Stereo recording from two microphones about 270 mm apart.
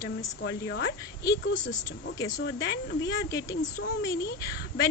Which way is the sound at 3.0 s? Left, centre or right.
Centre.